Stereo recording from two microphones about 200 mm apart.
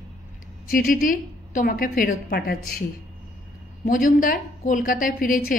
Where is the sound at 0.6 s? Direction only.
45° left (ahead or behind).